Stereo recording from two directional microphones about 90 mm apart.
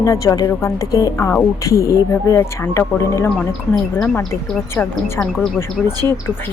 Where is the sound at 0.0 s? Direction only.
40° left (ahead or behind).